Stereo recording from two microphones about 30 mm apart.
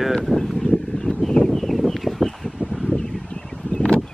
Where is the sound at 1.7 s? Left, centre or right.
Centre.